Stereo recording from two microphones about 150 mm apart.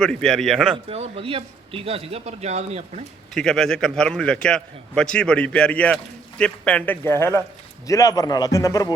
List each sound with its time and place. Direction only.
0.0 s a man's voice: 5° left (ahead or behind)
0.9 s a man's voice: 40° right (ahead or behind)
3.3 s a man's voice: 5° left (ahead or behind); by 8.9 s 20° left (ahead or behind)